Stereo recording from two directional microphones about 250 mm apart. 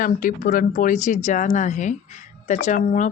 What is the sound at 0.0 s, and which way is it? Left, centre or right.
Speech, left.